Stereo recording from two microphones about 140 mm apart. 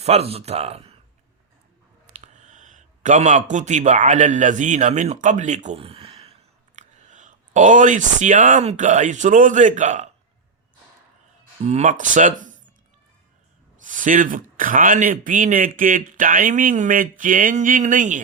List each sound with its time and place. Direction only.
0.0 s speech: 50° right (ahead or behind)
2.1 s speech: 60° right (ahead or behind)
5.8 s a sound: 45° right (ahead or behind)
7.1 s speech: 65° right (ahead or behind)
11.6 s speech: 55° right (ahead or behind)
13.8 s speech: 65° right (ahead or behind)